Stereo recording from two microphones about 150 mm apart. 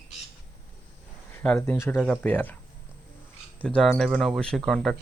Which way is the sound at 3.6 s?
5° left (ahead or behind).